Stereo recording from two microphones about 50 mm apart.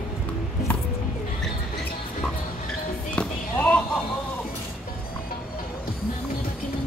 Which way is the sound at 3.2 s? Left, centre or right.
Left.